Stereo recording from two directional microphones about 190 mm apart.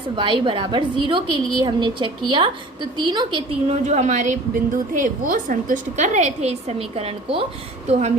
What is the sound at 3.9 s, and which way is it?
A woman's voice, 40° right (ahead or behind).